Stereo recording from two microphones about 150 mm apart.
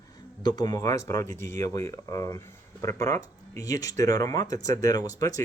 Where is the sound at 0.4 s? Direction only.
25° left (ahead or behind).